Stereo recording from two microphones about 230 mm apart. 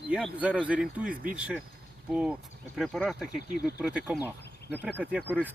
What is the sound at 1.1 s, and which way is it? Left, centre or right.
Speech, right.